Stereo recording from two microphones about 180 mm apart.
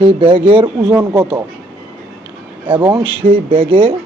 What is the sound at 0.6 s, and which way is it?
Speech, 20° right (ahead or behind).